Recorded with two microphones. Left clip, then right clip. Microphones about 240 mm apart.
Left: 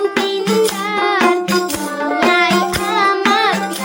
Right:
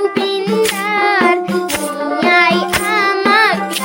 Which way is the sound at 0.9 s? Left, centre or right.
Right.